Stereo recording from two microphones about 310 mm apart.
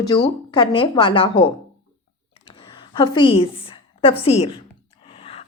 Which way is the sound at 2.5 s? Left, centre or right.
Centre.